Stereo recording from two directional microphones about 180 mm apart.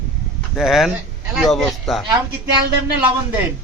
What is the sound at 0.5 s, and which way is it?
A man's voice, centre (ahead or behind).